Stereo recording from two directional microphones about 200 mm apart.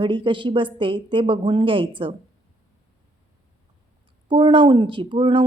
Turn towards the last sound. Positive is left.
turn(degrees=-25)  # may be behind; listen again after turning